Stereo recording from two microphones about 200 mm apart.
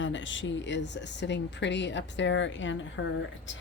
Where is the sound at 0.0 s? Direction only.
70° left (ahead or behind).